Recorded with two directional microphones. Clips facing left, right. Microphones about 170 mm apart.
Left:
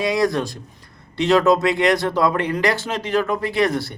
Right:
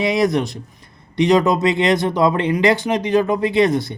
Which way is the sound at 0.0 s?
20° right (ahead or behind).